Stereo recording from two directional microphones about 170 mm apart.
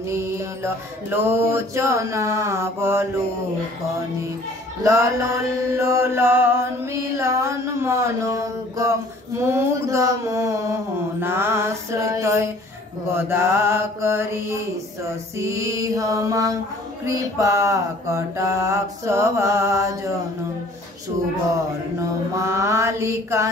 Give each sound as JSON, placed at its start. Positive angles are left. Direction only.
{"t": 0.0, "sound": "chant", "side_deg": -15}
{"t": 4.8, "sound": "chant", "side_deg": -20}
{"t": 15.3, "sound": "music", "side_deg": -15}
{"t": 17.0, "sound": "chant", "side_deg": -20}
{"t": 22.3, "sound": "chant", "side_deg": -15}